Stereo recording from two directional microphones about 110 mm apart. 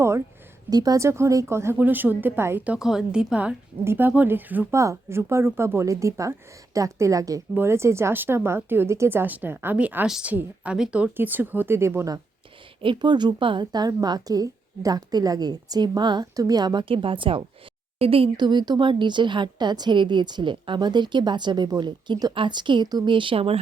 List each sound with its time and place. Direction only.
0.7 s speech: 35° right (ahead or behind); by 2.6 s 20° right (ahead or behind)
2.6 s a woman's voice: 5° right (ahead or behind); by 12.2 s 30° right (ahead or behind)
12.8 s a woman's voice: 45° right (ahead or behind)
16.9 s a woman's voice: 55° right (ahead or behind)
18.3 s a woman's voice: 40° right (ahead or behind); by 23.6 s 60° right (ahead or behind)